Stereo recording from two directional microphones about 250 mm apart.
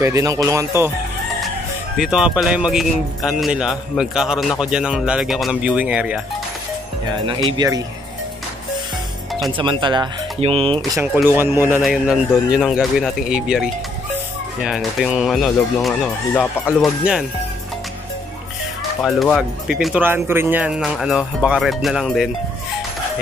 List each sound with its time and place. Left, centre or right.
0.0 s speech: centre
2.0 s speech: centre
7.1 s speech: centre
9.6 s speech: centre
10.8 s speech: centre
19.0 s speech: centre